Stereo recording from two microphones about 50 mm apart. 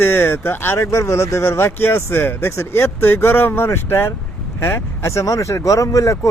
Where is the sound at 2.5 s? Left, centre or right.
Left.